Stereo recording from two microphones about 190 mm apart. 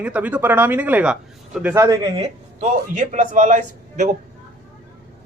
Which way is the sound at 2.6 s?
40° right (ahead or behind).